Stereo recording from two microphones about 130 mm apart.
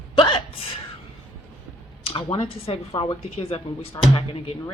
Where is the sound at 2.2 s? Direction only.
40° left (ahead or behind).